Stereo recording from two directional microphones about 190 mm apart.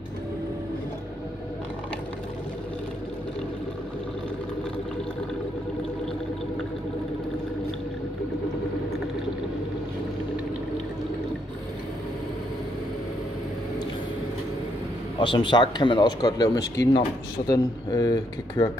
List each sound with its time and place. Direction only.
15.1 s speech: 25° left (ahead or behind)